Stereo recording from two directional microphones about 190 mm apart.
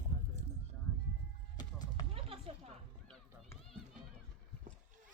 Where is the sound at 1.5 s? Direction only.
20° left (ahead or behind).